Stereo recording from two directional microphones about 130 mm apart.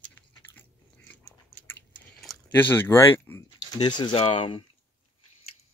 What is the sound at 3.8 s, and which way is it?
Speech, 35° left (ahead or behind).